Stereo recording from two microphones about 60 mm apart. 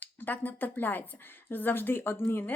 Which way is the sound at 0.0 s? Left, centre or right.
Left.